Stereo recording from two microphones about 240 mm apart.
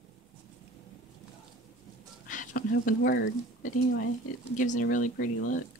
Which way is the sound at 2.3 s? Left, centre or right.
Left.